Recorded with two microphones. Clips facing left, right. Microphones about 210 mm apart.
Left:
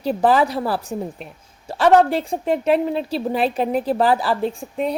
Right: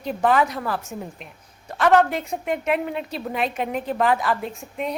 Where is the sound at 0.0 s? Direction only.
35° left (ahead or behind).